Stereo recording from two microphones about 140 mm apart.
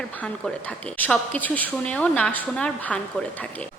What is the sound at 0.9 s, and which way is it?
A woman's voice, 10° left (ahead or behind).